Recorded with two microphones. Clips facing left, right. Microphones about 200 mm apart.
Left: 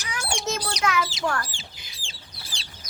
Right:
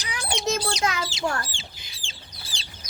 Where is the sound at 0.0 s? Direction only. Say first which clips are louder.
Right 2 dB; 15° right (ahead or behind).